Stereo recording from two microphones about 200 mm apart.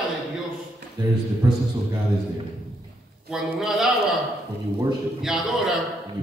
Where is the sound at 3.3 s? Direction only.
Centre (ahead or behind).